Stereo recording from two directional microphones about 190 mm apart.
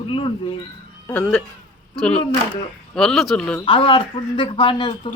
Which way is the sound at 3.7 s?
30° left (ahead or behind).